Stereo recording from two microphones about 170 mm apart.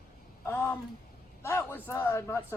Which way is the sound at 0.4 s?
15° left (ahead or behind).